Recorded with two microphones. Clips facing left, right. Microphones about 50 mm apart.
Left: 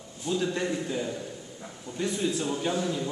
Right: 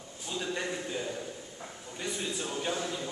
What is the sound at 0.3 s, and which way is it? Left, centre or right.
A man's voice, centre.